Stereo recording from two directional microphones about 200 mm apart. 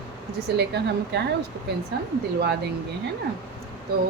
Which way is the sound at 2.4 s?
55° right (ahead or behind).